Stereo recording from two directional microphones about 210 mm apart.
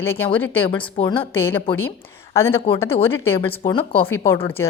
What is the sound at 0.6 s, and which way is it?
Speech, 25° left (ahead or behind).